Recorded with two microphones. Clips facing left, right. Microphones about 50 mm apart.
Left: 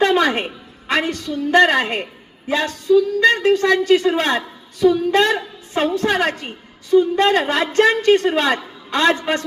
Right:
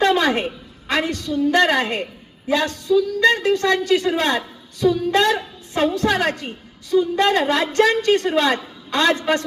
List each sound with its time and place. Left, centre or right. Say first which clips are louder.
0.0 s a woman's voice: left 1 dB; left